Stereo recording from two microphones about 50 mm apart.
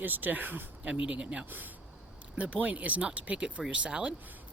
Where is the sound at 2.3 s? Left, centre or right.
Right.